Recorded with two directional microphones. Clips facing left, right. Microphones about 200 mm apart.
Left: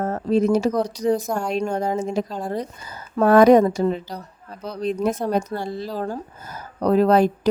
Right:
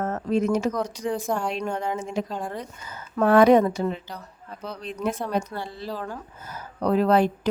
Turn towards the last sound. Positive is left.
turn(degrees=40)  # may be behind; listen again after turning